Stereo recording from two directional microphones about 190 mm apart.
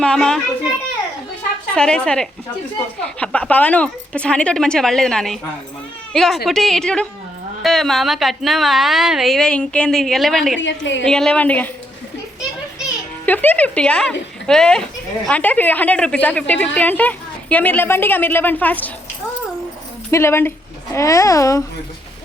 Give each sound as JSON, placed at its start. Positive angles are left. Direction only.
{"t": 0.0, "sound": "a woman's voice", "side_deg": 5}
{"t": 1.7, "sound": "a woman's voice", "side_deg": 5}
{"t": 10.6, "sound": "a woman's voice", "side_deg": 70}
{"t": 11.0, "sound": "a woman's voice", "side_deg": 5}
{"t": 13.2, "sound": "a woman's voice", "side_deg": 10}
{"t": 20.1, "sound": "a woman's voice", "side_deg": 15}